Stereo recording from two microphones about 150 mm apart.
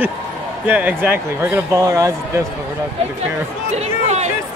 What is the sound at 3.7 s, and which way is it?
Speech, 45° right (ahead or behind).